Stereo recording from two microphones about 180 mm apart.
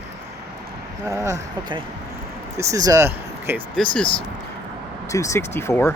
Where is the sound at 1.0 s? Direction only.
20° right (ahead or behind).